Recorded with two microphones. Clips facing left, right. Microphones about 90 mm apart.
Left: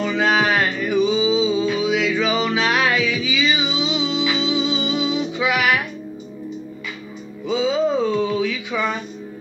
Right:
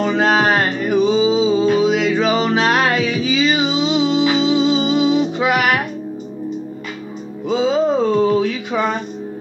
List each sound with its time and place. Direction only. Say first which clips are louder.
0.0 s music: right 3 dB; 40° right (ahead or behind)
7.4 s music: right 3 dB; 40° right (ahead or behind)